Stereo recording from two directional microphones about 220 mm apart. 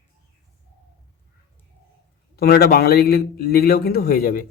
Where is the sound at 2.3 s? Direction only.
45° left (ahead or behind).